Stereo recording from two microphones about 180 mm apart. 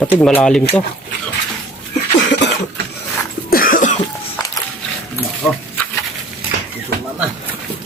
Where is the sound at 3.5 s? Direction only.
50° left (ahead or behind).